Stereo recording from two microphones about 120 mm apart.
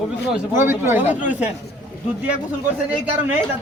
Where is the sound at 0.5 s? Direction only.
20° right (ahead or behind).